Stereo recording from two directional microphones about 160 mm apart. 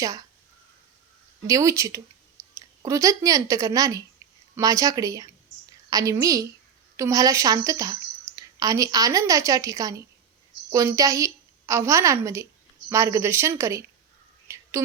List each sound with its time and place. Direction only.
0.0 s a woman's voice: 20° right (ahead or behind)
1.5 s a woman's voice: 20° right (ahead or behind)
14.4 s whispering: 20° right (ahead or behind)